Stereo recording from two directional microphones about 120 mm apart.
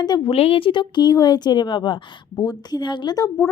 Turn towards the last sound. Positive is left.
turn(degrees=30)  # may be behind; listen again after turning